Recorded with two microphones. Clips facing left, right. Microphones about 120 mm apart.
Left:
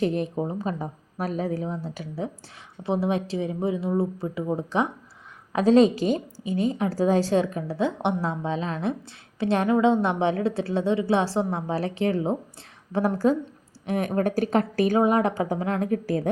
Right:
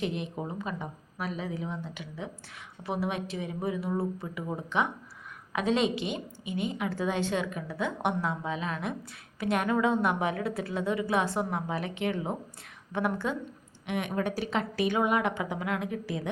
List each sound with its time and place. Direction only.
0.0 s a woman's voice: 40° left (ahead or behind)